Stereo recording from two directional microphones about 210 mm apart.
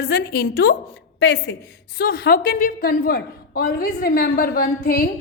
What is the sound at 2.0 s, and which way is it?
A woman's voice, 45° left (ahead or behind).